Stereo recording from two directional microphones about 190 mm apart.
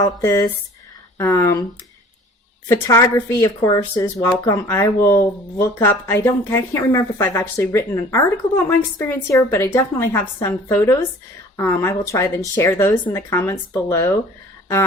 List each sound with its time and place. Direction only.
0.0 s speech: 15° left (ahead or behind)
2.6 s speech: 15° left (ahead or behind)